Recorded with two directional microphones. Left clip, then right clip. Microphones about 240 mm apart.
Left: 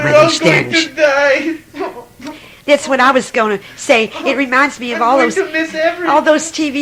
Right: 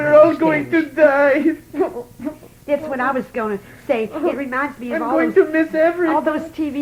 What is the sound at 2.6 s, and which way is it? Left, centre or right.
A woman's voice, left.